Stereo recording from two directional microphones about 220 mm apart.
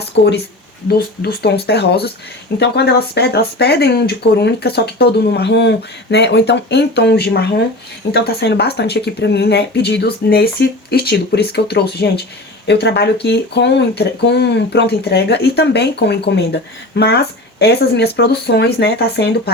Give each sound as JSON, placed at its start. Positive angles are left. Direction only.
{"t": 0.1, "sound": "speech", "side_deg": 55}